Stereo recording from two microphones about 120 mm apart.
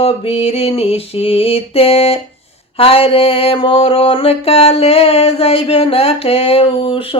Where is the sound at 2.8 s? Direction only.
50° left (ahead or behind).